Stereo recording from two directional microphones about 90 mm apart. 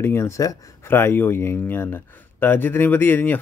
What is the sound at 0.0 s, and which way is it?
Speech, 25° left (ahead or behind).